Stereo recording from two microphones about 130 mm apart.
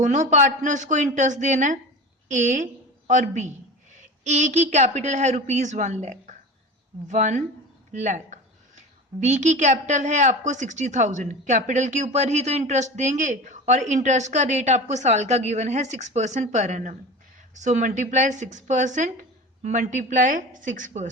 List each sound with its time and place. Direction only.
0.0 s a woman's voice: 70° right (ahead or behind)